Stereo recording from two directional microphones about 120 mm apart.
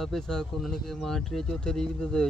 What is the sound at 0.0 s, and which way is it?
Speech, 5° left (ahead or behind).